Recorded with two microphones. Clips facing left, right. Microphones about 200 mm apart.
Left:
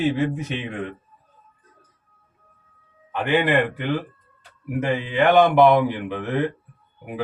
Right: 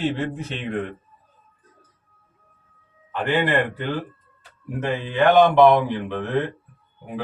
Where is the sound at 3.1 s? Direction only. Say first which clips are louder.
Left 1 dB; 15° left (ahead or behind).